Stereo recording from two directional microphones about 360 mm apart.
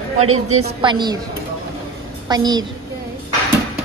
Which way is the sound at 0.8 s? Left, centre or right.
Centre.